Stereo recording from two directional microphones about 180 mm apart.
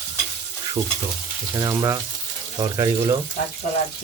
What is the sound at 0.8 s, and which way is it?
Speech, 20° right (ahead or behind).